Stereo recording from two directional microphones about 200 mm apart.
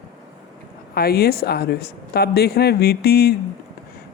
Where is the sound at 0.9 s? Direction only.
50° left (ahead or behind).